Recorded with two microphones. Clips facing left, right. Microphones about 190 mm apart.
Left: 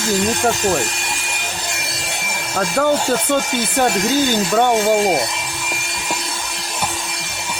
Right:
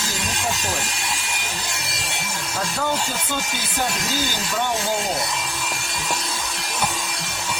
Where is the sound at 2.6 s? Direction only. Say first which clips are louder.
Left 8 dB; 65° left (ahead or behind).